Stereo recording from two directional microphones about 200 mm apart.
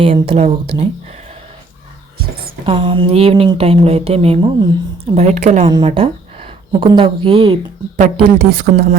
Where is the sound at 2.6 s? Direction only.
25° right (ahead or behind).